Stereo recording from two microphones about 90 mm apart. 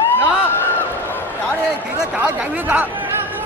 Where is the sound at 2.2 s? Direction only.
15° right (ahead or behind).